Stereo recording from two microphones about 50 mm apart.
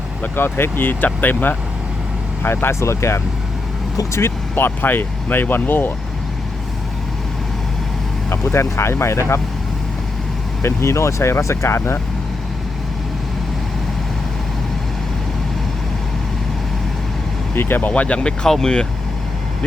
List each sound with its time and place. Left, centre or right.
0.3 s speech: left
2.8 s speech: left
4.5 s speech: left
8.3 s speech: left
10.6 s speech: left
17.5 s speech: left
18.2 s speech: centre